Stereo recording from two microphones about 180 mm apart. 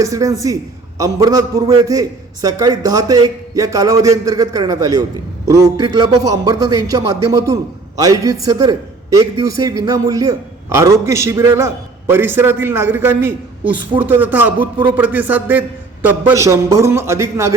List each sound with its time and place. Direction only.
0.0 s a man's voice: 20° right (ahead or behind)